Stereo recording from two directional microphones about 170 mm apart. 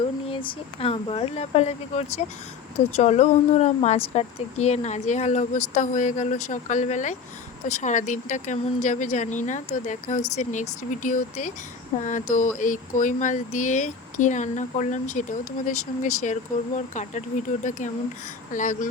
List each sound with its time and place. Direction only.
0.3 s speech: 35° left (ahead or behind); by 18.9 s 50° left (ahead or behind)